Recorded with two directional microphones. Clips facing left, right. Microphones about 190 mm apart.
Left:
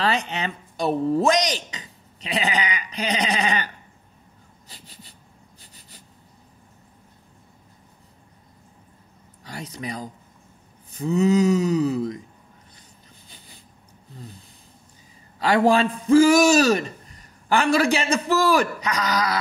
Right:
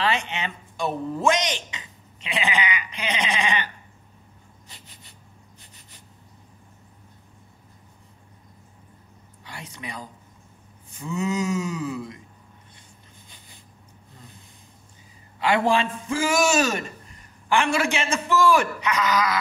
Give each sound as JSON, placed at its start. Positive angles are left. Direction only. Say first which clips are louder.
{"t": 0.0, "sound": "a man's voice", "louder": "left 2 dB", "side_deg": 40}
{"t": 4.6, "sound": "a sound", "louder": "left 5 dB", "side_deg": 35}
{"t": 5.6, "sound": "writing", "louder": "left 2 dB", "side_deg": 35}
{"t": 9.4, "sound": "a man's voice", "louder": "left 6 dB", "side_deg": 40}
{"t": 15.3, "sound": "a man's voice", "louder": "left 3 dB", "side_deg": 40}